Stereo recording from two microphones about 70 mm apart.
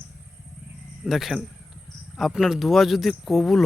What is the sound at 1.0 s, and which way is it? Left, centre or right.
Speech, centre.